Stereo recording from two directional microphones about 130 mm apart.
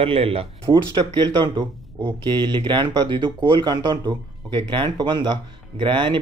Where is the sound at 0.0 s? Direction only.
45° right (ahead or behind).